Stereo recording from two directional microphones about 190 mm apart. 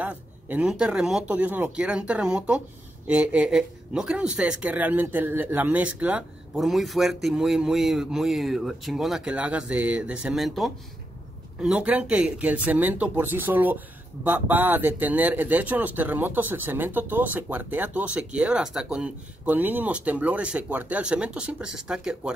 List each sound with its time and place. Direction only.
0.0 s speech: 5° right (ahead or behind)